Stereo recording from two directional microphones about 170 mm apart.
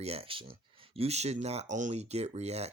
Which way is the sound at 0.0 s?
35° right (ahead or behind).